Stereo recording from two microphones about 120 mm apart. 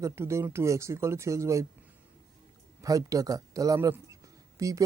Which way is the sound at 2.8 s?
30° right (ahead or behind).